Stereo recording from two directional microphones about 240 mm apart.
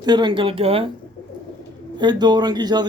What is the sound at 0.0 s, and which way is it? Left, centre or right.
Speech, centre.